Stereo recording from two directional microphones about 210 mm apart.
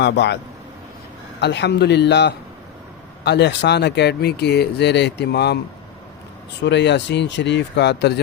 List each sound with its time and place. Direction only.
0.0 s speech: 55° left (ahead or behind)
1.4 s speech: 55° left (ahead or behind)
6.6 s speech: 55° left (ahead or behind)